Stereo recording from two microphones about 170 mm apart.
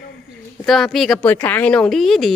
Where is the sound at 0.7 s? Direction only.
Centre (ahead or behind).